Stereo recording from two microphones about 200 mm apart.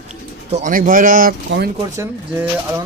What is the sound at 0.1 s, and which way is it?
Speech, 35° right (ahead or behind).